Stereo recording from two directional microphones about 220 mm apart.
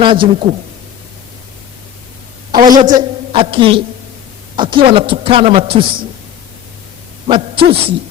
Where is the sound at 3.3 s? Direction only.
25° right (ahead or behind).